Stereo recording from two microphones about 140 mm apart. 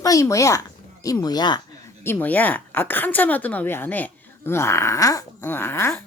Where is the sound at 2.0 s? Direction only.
10° left (ahead or behind).